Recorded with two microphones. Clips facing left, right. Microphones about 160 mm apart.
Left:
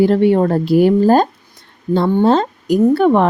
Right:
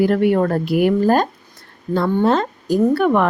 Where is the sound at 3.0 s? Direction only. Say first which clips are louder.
Left 4 dB; 30° left (ahead or behind).